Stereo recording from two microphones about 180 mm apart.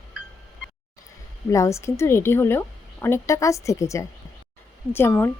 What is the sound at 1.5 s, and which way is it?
A woman's voice, 15° left (ahead or behind).